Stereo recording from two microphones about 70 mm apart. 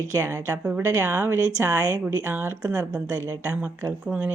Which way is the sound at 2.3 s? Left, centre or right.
Right.